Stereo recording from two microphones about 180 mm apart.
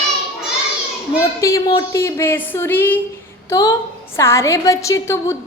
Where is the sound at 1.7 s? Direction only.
20° left (ahead or behind).